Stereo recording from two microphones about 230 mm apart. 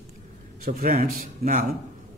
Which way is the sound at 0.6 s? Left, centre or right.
Right.